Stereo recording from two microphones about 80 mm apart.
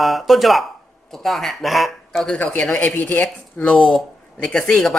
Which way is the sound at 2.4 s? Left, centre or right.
Left.